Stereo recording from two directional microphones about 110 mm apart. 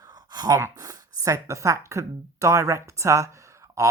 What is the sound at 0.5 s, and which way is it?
A woman's voice, 30° right (ahead or behind).